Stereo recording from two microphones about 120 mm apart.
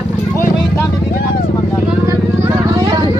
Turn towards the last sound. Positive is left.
turn(degrees=-30)  # may be behind; listen again after turning